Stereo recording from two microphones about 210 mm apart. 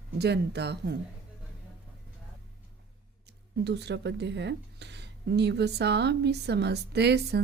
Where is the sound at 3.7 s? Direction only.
55° right (ahead or behind).